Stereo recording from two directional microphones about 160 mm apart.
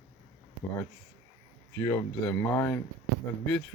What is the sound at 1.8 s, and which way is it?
Speech, 20° left (ahead or behind).